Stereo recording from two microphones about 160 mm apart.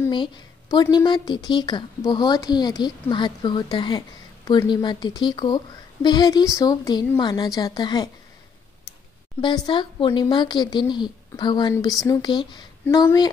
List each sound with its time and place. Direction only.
0.1 s speech: 30° left (ahead or behind)
9.4 s speech: 30° left (ahead or behind)